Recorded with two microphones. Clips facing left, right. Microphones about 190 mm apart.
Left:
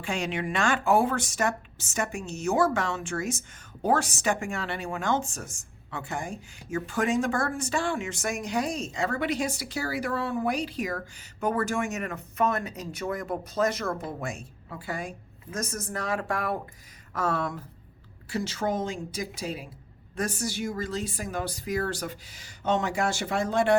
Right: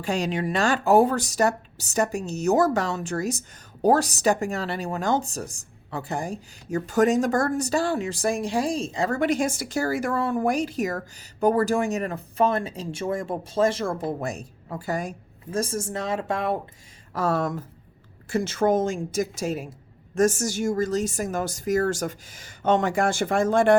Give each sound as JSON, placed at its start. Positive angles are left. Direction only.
{"t": 0.0, "sound": "a woman's voice", "side_deg": -40}
{"t": 15.5, "sound": "speech", "side_deg": -30}
{"t": 17.2, "sound": "a woman's voice", "side_deg": -40}